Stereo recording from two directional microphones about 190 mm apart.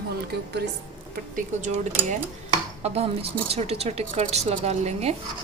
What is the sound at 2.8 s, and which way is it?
Speech, 35° right (ahead or behind).